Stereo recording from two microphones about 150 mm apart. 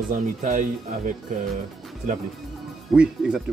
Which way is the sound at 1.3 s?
60° right (ahead or behind).